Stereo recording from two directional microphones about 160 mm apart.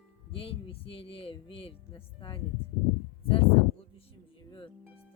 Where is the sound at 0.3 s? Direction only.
35° left (ahead or behind).